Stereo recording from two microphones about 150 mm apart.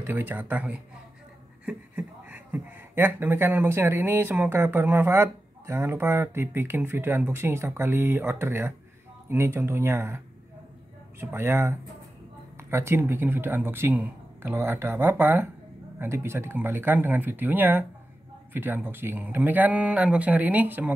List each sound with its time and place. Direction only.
0.0 s speech: 10° right (ahead or behind)